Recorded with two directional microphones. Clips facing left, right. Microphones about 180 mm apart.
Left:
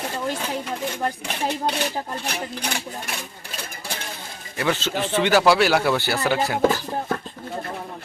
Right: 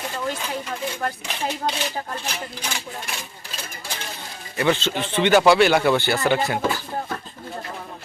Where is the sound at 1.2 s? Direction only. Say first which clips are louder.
Left 1 dB; 60° left (ahead or behind).